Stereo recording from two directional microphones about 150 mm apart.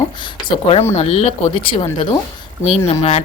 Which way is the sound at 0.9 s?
45° left (ahead or behind).